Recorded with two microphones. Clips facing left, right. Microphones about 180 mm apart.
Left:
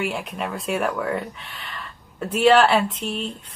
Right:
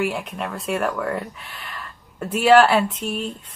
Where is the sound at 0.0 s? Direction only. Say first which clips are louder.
Right 2 dB; centre (ahead or behind).